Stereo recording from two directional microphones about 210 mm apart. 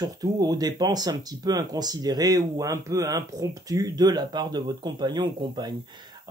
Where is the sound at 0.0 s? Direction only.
20° right (ahead or behind).